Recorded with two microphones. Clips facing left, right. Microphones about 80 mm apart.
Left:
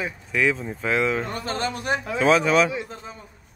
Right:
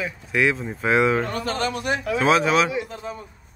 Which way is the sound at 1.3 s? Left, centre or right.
Left.